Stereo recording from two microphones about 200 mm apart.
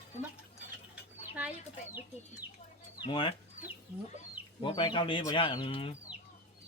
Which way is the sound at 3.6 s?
35° left (ahead or behind).